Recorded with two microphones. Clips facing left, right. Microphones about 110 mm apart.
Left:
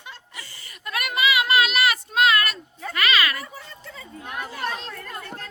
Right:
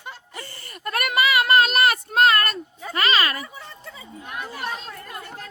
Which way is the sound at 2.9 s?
40° right (ahead or behind).